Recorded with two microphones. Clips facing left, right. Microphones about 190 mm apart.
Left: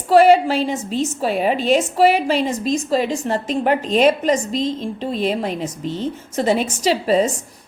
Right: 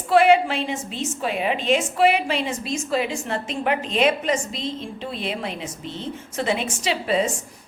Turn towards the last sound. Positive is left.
turn(degrees=40)  # may be behind; listen again after turning